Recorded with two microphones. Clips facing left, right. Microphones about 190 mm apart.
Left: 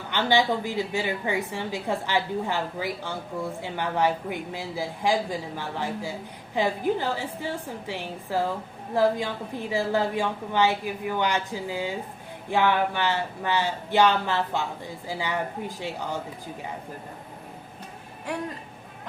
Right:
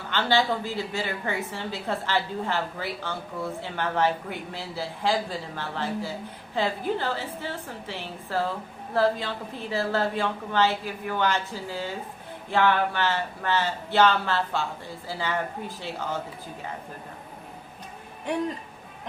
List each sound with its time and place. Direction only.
0.1 s speech: 15° left (ahead or behind)
18.3 s speech: 20° right (ahead or behind)